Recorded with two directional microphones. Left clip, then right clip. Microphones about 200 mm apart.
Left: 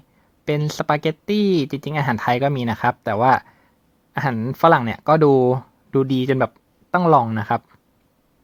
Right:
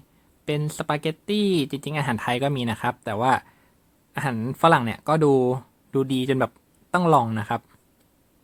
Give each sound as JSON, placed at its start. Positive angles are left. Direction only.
{"t": 0.4, "sound": "speech", "side_deg": 25}